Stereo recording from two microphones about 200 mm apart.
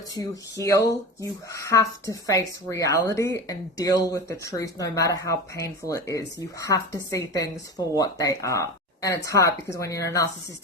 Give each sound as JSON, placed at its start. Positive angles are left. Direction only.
{"t": 0.6, "sound": "speech", "side_deg": 15}